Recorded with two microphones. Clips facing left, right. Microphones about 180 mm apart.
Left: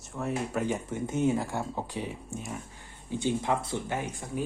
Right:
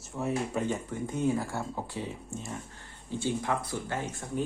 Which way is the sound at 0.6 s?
20° left (ahead or behind).